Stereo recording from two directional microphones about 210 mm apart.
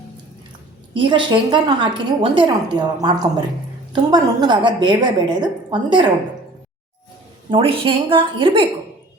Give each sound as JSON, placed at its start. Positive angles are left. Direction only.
{"t": 0.9, "sound": "a woman's voice", "side_deg": -25}
{"t": 7.5, "sound": "a woman's voice", "side_deg": -25}